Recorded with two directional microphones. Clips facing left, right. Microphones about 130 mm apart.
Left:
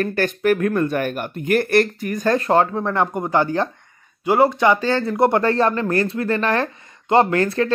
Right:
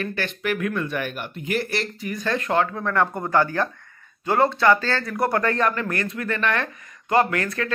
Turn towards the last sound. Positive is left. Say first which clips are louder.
# left 7 dB
turn(degrees=30)  # may be behind; listen again after turning